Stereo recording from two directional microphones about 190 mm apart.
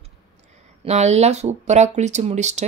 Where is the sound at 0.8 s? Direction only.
35° right (ahead or behind).